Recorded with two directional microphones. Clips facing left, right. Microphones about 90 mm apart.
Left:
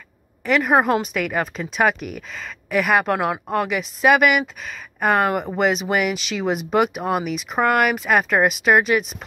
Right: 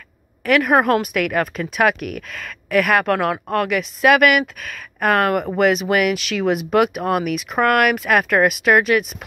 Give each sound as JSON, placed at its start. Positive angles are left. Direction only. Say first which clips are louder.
{"t": 0.5, "sound": "speech", "louder": "right 2 dB", "side_deg": 5}
{"t": 2.0, "sound": "speech", "louder": "right 3 dB", "side_deg": -65}
{"t": 2.4, "sound": "speech", "louder": "right 3 dB", "side_deg": 5}